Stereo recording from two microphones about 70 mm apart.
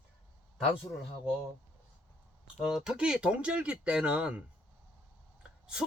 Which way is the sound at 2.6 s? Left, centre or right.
Centre.